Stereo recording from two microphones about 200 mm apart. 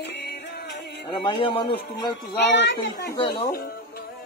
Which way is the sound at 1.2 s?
25° left (ahead or behind).